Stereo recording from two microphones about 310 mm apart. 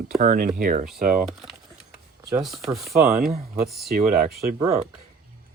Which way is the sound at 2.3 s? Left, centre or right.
Centre.